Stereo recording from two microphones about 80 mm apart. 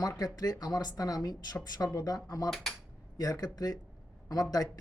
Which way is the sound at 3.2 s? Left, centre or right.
Left.